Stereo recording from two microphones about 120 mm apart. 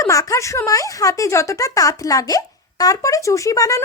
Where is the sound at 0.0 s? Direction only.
25° left (ahead or behind).